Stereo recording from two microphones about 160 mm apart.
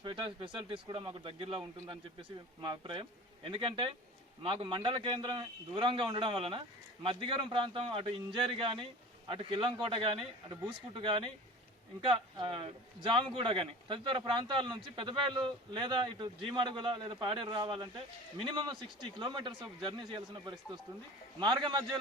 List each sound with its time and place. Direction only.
0.0 s a man's voice: 30° right (ahead or behind)